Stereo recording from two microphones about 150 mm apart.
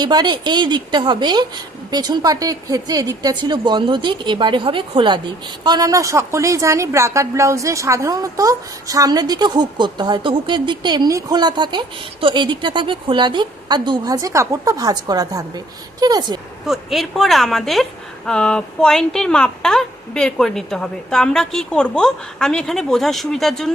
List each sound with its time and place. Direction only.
0.0 s a woman's voice: 30° right (ahead or behind)
16.6 s speech: centre (ahead or behind)